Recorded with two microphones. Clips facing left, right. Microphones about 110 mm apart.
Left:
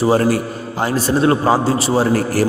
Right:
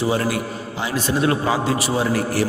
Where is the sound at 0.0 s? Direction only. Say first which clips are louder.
Left 6 dB; 40° left (ahead or behind).